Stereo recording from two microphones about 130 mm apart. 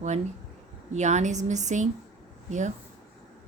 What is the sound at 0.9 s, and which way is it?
Speech, 60° right (ahead or behind).